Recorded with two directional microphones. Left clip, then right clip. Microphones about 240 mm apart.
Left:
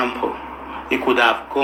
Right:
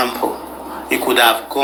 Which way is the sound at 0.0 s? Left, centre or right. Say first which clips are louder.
Right 3 dB; centre.